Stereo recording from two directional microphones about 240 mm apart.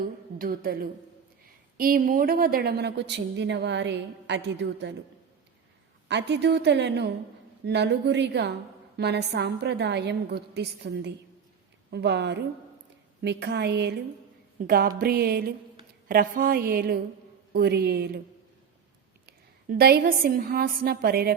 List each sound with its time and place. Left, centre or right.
0.3 s a woman's voice: right
6.1 s a woman's voice: right
19.2 s a woman's voice: right